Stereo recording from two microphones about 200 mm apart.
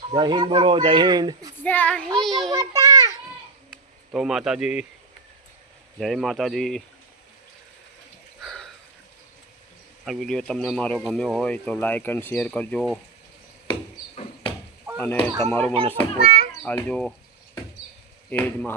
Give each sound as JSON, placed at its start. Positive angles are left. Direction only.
{"t": 0.1, "sound": "speech", "side_deg": -25}
{"t": 1.5, "sound": "child singing", "side_deg": 10}
{"t": 2.1, "sound": "speech", "side_deg": 0}
{"t": 2.5, "sound": "a sound", "side_deg": -15}
{"t": 3.7, "sound": "speech", "side_deg": -5}
{"t": 6.0, "sound": "speech", "side_deg": 0}
{"t": 8.4, "sound": "a sound", "side_deg": 0}
{"t": 10.1, "sound": "speech", "side_deg": 0}
{"t": 14.9, "sound": "child singing", "side_deg": 5}
{"t": 16.6, "sound": "speech", "side_deg": 5}
{"t": 18.3, "sound": "child singing", "side_deg": 10}